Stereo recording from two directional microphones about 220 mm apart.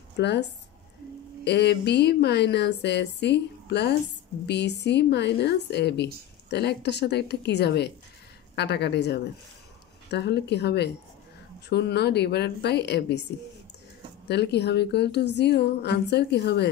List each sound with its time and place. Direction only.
0.2 s speech: 50° left (ahead or behind)
14.2 s speech: 50° left (ahead or behind)